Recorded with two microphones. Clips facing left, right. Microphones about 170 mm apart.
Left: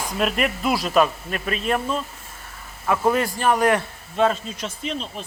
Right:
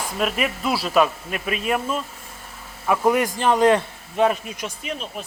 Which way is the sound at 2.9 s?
15° right (ahead or behind).